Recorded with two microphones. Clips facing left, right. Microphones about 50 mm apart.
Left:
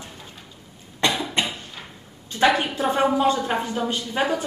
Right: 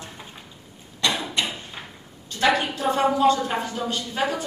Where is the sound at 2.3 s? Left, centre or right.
Left.